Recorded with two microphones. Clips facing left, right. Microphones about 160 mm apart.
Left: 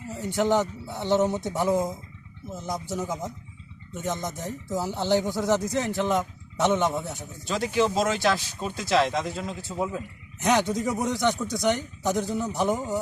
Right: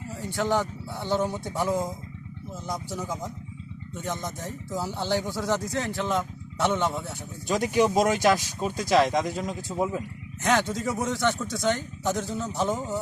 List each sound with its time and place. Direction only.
0.1 s speech: 20° left (ahead or behind)
7.4 s speech: 15° right (ahead or behind)
10.4 s speech: 15° left (ahead or behind)